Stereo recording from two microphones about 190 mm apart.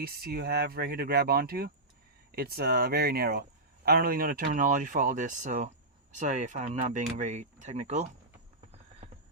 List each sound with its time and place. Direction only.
0.0 s speech: 50° right (ahead or behind)